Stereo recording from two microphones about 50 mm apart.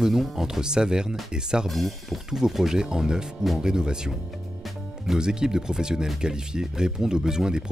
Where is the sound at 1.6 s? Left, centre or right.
Centre.